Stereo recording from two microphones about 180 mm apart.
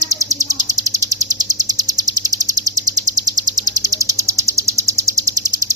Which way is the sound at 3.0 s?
20° right (ahead or behind).